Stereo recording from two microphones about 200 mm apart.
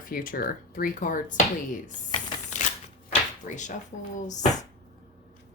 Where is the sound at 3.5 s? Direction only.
40° left (ahead or behind).